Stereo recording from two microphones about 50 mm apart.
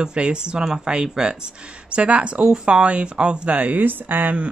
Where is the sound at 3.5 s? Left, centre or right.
Right.